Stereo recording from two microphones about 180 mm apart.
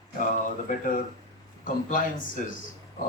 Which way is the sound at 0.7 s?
50° left (ahead or behind).